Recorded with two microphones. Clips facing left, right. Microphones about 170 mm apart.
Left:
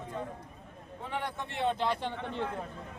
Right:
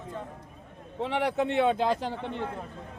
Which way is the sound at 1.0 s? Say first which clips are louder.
Right 10 dB; 90° right.